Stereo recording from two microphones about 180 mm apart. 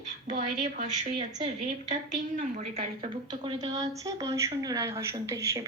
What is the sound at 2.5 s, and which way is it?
A woman's voice, 35° right (ahead or behind).